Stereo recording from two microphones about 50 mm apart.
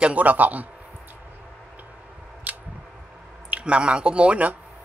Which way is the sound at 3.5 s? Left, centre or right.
Right.